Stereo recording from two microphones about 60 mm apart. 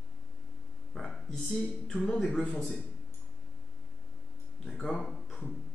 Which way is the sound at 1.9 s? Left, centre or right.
Centre.